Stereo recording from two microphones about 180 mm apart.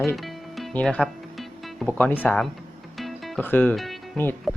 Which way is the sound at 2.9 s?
Centre (ahead or behind).